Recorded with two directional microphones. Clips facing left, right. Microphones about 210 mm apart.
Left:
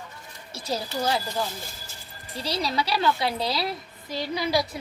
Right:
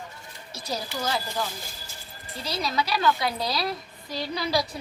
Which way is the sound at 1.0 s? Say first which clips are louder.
Left 2 dB; 30° left (ahead or behind).